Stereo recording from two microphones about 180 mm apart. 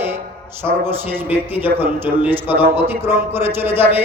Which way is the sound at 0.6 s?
10° right (ahead or behind).